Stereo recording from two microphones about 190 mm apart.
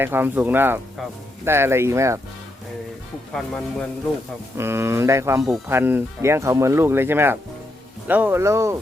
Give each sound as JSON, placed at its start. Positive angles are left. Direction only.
{"t": 0.0, "sound": "speech", "side_deg": -10}
{"t": 3.3, "sound": "speech", "side_deg": 0}
{"t": 4.5, "sound": "speech", "side_deg": -15}